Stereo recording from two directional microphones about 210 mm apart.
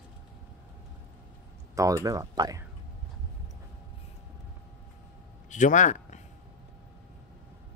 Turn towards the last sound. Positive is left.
turn(degrees=35)  # may be behind; listen again after turning